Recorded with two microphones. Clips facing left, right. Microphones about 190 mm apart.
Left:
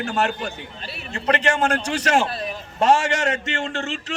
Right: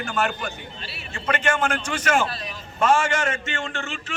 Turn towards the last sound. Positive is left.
turn(degrees=40)  # may be behind; listen again after turning